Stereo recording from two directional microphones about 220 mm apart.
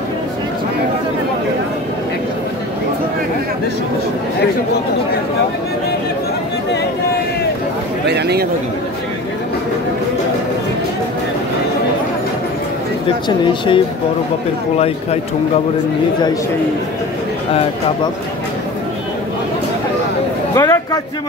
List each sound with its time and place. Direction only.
8.1 s a sound: 50° right (ahead or behind)
13.4 s speech: 20° left (ahead or behind)
20.5 s a man's voice: 15° left (ahead or behind)